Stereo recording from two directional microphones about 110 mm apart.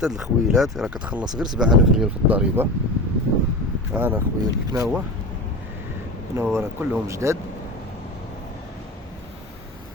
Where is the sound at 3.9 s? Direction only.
15° right (ahead or behind).